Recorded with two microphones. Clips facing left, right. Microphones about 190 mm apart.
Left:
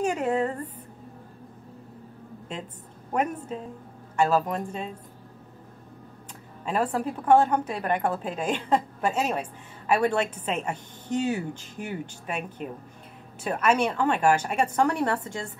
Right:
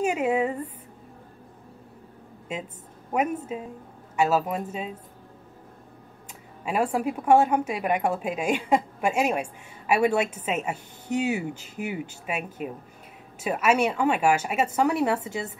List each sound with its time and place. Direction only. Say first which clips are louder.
0.0 s a woman's voice: right 1 dB; 10° right (ahead or behind)
2.5 s a woman's voice: right 4 dB; 10° right (ahead or behind)
6.6 s a woman's voice: right 1 dB; 10° right (ahead or behind)